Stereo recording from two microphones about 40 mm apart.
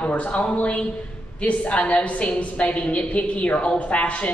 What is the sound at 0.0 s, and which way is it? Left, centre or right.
Speech, left.